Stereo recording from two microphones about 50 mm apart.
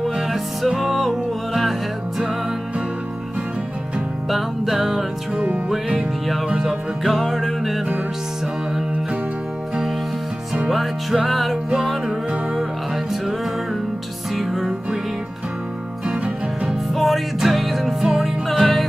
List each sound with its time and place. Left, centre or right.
0.0 s music: centre
4.3 s music: centre
5.3 s music: right
5.7 s music: centre
10.7 s music: centre
14.3 s music: centre
16.9 s music: centre